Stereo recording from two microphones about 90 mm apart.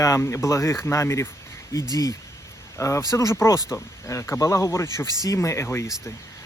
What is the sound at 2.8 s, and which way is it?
Speech, 35° left (ahead or behind).